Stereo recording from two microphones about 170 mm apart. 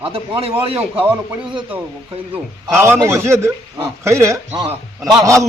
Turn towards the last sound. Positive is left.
turn(degrees=-20)  # may be behind; listen again after turning